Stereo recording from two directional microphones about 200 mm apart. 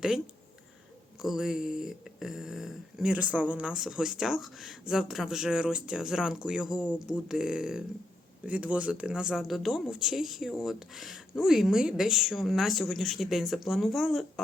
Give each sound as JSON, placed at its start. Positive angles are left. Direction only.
{"t": 1.2, "sound": "speech", "side_deg": 0}